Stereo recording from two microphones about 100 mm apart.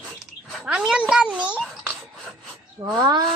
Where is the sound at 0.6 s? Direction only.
10° right (ahead or behind).